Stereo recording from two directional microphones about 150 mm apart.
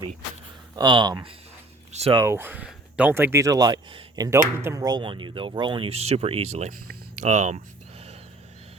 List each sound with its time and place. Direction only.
0.8 s speech: 30° right (ahead or behind)
1.9 s a sound: 45° right (ahead or behind)
2.2 s speech: 15° right (ahead or behind); by 7.6 s 50° right (ahead or behind)